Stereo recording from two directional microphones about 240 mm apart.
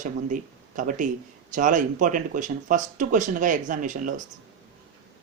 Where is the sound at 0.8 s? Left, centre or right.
Right.